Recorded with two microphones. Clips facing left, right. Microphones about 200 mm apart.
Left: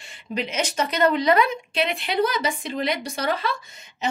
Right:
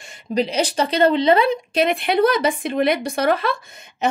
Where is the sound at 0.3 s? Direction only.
35° right (ahead or behind).